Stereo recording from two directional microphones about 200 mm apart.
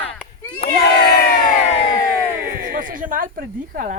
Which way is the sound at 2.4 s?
45° right (ahead or behind).